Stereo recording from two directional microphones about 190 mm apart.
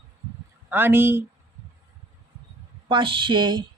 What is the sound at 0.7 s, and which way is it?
Speech, 10° right (ahead or behind).